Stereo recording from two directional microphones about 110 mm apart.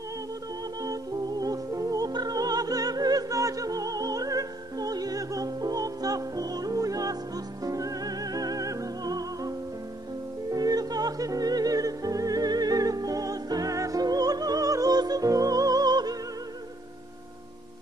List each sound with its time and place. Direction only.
1.4 s music: 30° right (ahead or behind)
10.5 s music: 35° right (ahead or behind)